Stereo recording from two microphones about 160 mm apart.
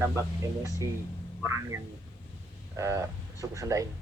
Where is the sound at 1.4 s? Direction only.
15° right (ahead or behind).